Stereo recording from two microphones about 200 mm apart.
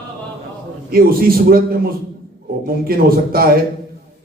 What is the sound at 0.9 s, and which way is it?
A man's voice, 45° right (ahead or behind).